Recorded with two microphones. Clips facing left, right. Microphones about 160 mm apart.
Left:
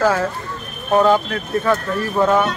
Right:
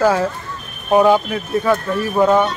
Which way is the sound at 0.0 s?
10° right (ahead or behind).